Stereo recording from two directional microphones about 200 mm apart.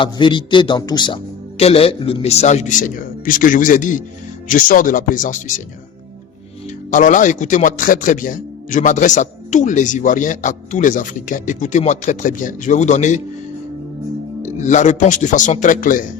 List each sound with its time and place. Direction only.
0.0 s a man's voice: 25° left (ahead or behind); by 5.6 s 40° left (ahead or behind)
6.9 s a man's voice: 40° left (ahead or behind)
14.4 s a man's voice: 35° left (ahead or behind)